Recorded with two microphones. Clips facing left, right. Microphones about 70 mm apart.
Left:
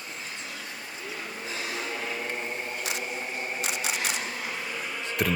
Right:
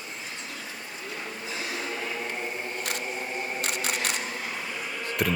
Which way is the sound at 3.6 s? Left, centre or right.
Right.